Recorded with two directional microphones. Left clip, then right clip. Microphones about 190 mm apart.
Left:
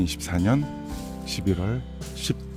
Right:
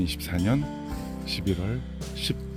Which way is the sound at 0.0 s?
15° left (ahead or behind).